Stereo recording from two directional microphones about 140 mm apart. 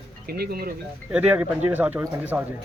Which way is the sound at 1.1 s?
10° right (ahead or behind).